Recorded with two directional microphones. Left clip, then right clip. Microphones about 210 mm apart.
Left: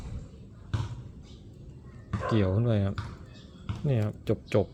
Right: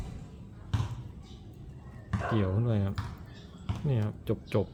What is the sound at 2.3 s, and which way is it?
Speech, 25° left (ahead or behind).